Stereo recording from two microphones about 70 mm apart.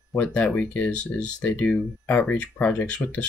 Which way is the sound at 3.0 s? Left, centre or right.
Left.